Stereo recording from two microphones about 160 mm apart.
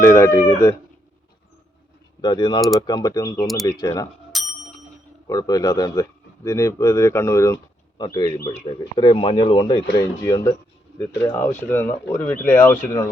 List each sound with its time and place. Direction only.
0.0 s speech: 15° left (ahead or behind)
2.2 s speech: 30° left (ahead or behind)
4.3 s bicycle bell: centre (ahead or behind)
5.3 s speech: 25° left (ahead or behind)
10.0 s speech: 20° left (ahead or behind)